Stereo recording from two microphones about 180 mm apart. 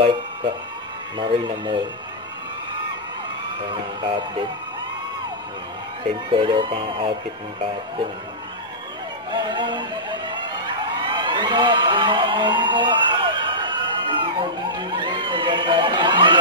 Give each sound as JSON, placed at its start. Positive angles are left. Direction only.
{"t": 1.1, "sound": "speech", "side_deg": -25}
{"t": 4.0, "sound": "speech", "side_deg": -25}
{"t": 6.3, "sound": "speech", "side_deg": -25}
{"t": 9.3, "sound": "speech", "side_deg": -25}
{"t": 11.0, "sound": "a sound", "side_deg": -25}